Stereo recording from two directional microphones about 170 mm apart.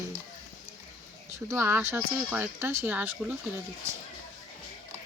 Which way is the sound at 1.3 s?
15° right (ahead or behind).